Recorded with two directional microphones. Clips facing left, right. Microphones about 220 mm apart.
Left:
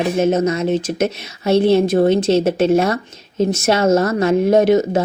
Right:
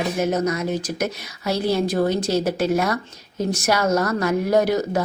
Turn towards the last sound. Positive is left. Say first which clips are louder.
# left 6 dB
turn(degrees=25)  # may be behind; listen again after turning